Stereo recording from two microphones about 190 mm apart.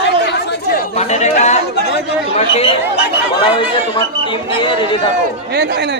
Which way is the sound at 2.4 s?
30° left (ahead or behind).